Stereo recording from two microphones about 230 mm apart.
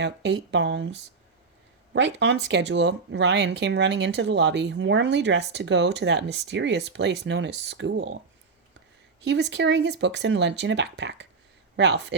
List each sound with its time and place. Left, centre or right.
0.0 s speech: right
9.2 s speech: right